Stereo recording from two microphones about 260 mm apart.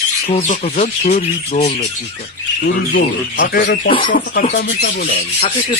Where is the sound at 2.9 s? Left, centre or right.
Left.